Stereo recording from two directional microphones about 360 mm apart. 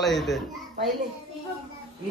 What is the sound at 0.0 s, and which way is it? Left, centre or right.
Speech, centre.